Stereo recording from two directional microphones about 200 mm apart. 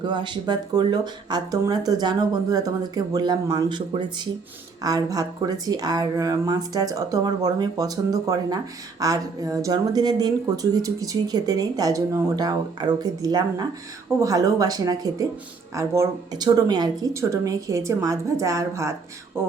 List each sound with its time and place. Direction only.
0.1 s a woman's voice: 25° right (ahead or behind)